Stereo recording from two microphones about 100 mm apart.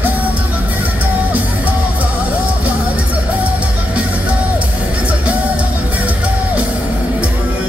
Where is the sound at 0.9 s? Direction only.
15° right (ahead or behind).